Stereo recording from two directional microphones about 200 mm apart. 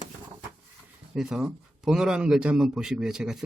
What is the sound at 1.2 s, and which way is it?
A man's voice, centre (ahead or behind).